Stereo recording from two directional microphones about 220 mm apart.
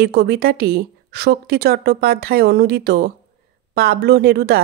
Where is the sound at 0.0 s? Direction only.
45° right (ahead or behind).